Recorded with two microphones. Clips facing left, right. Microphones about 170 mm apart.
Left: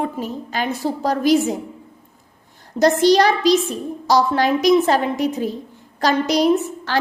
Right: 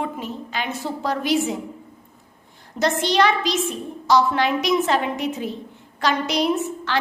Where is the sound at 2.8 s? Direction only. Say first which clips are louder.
Left 6 dB; 40° left (ahead or behind).